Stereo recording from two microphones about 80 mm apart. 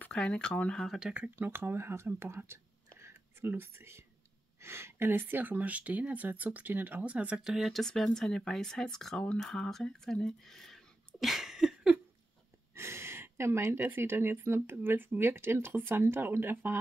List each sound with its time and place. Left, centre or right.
0.0 s speech: centre
0.8 s speech: centre
1.3 s speech: right
7.5 s speech: centre
12.7 s speech: right